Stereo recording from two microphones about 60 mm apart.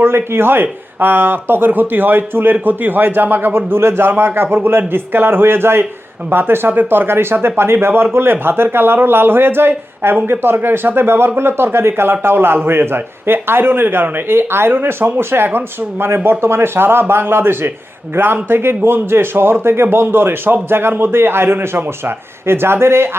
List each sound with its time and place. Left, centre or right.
0.0 s a man's voice: right